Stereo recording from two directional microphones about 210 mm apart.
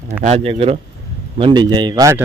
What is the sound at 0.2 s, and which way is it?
Speech, 30° right (ahead or behind).